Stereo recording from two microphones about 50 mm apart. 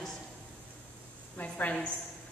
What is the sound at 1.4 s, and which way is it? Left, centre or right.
Speech, left.